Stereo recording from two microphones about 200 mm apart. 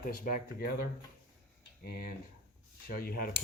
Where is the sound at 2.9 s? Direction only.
50° left (ahead or behind).